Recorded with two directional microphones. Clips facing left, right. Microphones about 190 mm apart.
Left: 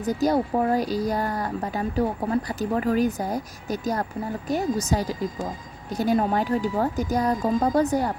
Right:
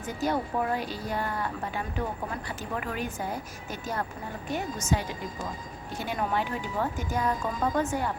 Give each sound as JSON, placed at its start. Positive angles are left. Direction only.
{"t": 0.0, "sound": "speech", "side_deg": 40}